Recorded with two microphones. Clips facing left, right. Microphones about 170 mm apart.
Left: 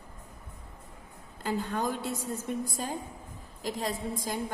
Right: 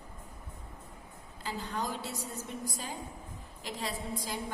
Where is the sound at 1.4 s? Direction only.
50° left (ahead or behind).